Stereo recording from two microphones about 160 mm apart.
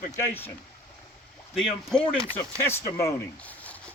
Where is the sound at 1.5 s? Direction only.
5° left (ahead or behind).